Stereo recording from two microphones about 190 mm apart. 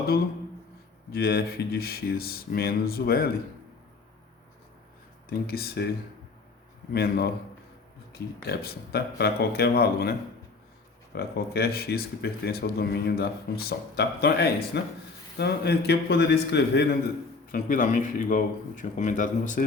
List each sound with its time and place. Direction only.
1.1 s speech: 55° left (ahead or behind)
5.3 s speech: 55° left (ahead or behind)
6.9 s speech: 55° left (ahead or behind)
17.5 s speech: 45° left (ahead or behind)